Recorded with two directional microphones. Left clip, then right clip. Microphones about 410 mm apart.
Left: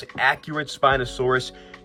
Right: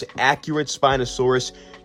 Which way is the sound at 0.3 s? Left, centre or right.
Centre.